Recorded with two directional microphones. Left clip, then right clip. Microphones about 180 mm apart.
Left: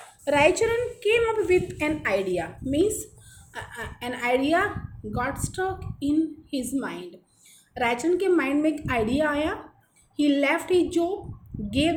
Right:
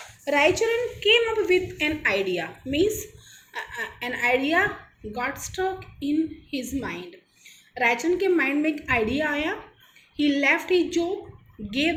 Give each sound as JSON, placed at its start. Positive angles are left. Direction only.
{"t": 0.3, "sound": "a woman's voice", "side_deg": 30}
{"t": 1.0, "sound": "a woman's voice", "side_deg": 40}